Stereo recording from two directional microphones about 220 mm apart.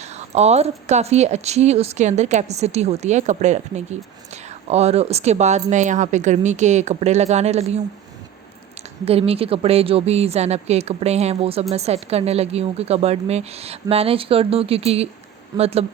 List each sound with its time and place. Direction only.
0.0 s speech: 30° right (ahead or behind)
9.0 s a woman's voice: 25° right (ahead or behind)